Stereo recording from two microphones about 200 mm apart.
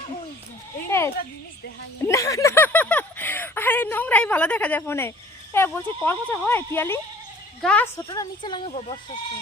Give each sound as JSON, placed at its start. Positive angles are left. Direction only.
{"t": 0.9, "sound": "a sound", "side_deg": 15}
{"t": 2.0, "sound": "a woman's voice", "side_deg": 15}
{"t": 7.9, "sound": "speech", "side_deg": 20}